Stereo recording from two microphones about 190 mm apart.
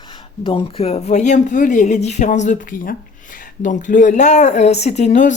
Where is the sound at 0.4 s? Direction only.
30° left (ahead or behind).